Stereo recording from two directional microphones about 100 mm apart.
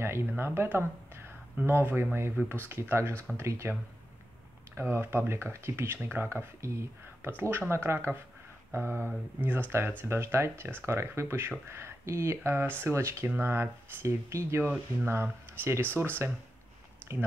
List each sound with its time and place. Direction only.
0.3 s speech: 20° right (ahead or behind)
4.7 s speech: 25° right (ahead or behind)
14.6 s speech: 15° right (ahead or behind)